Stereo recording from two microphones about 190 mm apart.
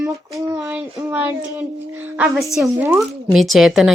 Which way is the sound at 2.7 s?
10° right (ahead or behind).